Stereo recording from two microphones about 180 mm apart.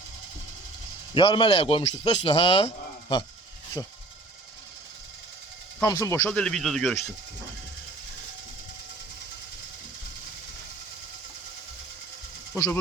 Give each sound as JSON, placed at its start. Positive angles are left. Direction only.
{"t": 1.1, "sound": "a man's voice", "side_deg": 25}
{"t": 3.8, "sound": "speech", "side_deg": 20}
{"t": 5.8, "sound": "speech", "side_deg": 15}
{"t": 6.2, "sound": "speech", "side_deg": 5}
{"t": 12.5, "sound": "speech", "side_deg": 20}